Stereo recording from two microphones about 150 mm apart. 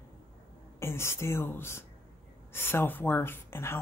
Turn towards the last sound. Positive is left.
turn(degrees=15)  # may be behind; listen again after turning